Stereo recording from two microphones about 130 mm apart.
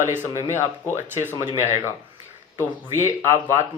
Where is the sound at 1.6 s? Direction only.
20° right (ahead or behind).